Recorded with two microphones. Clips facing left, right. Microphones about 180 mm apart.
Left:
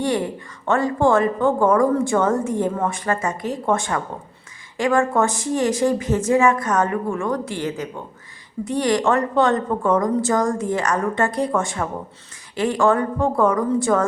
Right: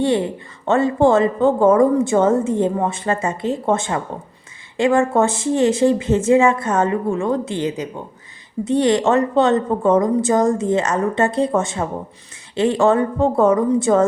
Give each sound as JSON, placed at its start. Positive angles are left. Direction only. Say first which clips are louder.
{"t": 0.0, "sound": "a woman's voice", "louder": "right 4 dB", "side_deg": -25}